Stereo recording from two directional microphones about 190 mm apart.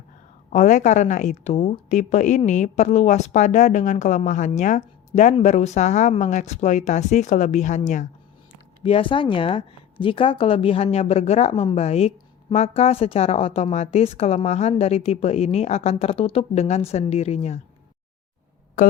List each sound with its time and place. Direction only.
0.5 s a woman's voice: 40° left (ahead or behind)
8.8 s a woman's voice: 30° left (ahead or behind)